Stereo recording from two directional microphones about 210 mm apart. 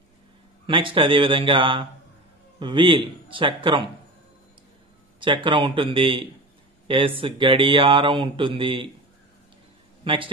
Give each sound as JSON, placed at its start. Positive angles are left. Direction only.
{"t": 0.7, "sound": "speech", "side_deg": -25}
{"t": 5.2, "sound": "speech", "side_deg": -25}
{"t": 10.0, "sound": "speech", "side_deg": -25}